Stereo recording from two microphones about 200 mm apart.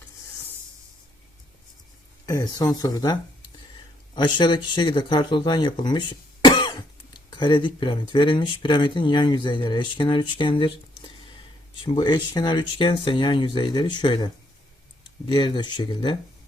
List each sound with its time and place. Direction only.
2.2 s speech: 20° left (ahead or behind)
11.8 s speech: 25° left (ahead or behind)